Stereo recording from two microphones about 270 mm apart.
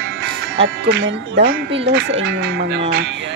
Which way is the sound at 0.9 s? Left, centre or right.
Right.